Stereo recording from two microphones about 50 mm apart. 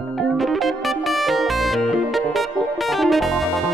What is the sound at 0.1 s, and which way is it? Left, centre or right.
Music, centre.